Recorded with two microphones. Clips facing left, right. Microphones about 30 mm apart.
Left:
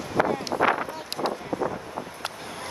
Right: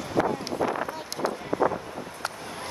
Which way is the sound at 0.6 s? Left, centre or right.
Left.